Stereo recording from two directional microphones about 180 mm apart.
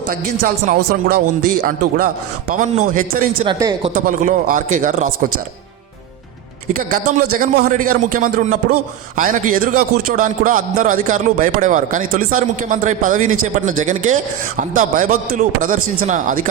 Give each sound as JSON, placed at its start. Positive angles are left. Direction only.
{"t": 0.1, "sound": "a man's voice", "side_deg": -55}
{"t": 3.4, "sound": "speech", "side_deg": -25}
{"t": 3.9, "sound": "a man's voice", "side_deg": -45}
{"t": 6.7, "sound": "a man's voice", "side_deg": -50}